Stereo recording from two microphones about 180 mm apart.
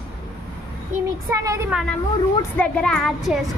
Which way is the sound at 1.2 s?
15° right (ahead or behind).